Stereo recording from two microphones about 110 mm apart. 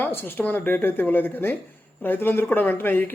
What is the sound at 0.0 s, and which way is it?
Speech, 20° left (ahead or behind).